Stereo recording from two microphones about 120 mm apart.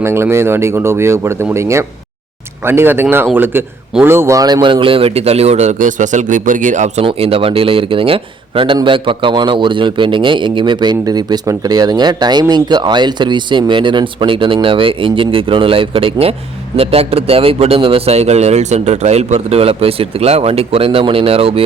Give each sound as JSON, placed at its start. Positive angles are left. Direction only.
{"t": 0.0, "sound": "a man's voice", "side_deg": -20}
{"t": 7.0, "sound": "speech", "side_deg": -50}